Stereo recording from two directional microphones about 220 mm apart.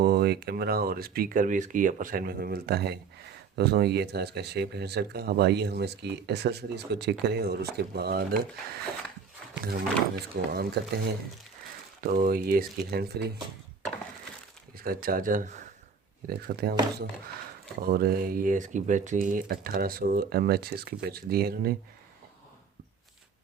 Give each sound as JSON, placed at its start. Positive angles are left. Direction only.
{"t": 0.0, "sound": "speech", "side_deg": -45}
{"t": 12.1, "sound": "speech", "side_deg": -40}
{"t": 14.8, "sound": "speech", "side_deg": -40}
{"t": 17.8, "sound": "speech", "side_deg": -40}